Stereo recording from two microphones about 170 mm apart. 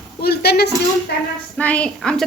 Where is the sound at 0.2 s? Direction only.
70° left (ahead or behind).